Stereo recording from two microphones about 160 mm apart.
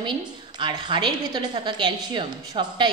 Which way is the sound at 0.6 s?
30° right (ahead or behind).